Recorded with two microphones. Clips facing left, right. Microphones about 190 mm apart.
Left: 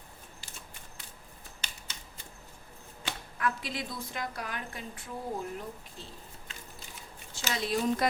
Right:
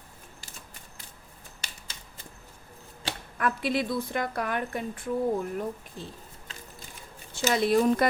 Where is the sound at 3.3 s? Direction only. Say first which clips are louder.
Right 7 dB; 60° right (ahead or behind).